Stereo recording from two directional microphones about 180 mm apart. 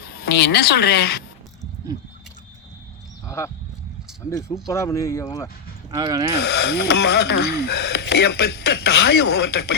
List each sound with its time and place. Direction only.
0.2 s a woman's voice: 65° left (ahead or behind)
3.2 s a sound: 15° left (ahead or behind)
4.3 s speech: 15° left (ahead or behind)
5.9 s speech: 20° right (ahead or behind)
6.4 s speech: 70° left (ahead or behind)